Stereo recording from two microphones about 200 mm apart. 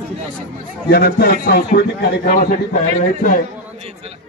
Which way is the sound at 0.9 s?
50° left (ahead or behind).